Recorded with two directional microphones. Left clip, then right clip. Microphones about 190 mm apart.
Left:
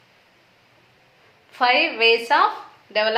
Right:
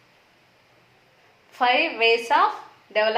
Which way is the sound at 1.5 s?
15° left (ahead or behind).